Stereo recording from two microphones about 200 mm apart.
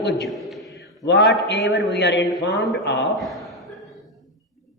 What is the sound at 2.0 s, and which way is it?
Speech, 60° left (ahead or behind).